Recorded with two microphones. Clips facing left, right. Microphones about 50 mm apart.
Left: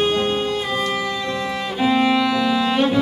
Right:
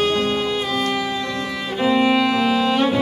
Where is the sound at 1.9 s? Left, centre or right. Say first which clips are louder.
Right 1 dB; centre.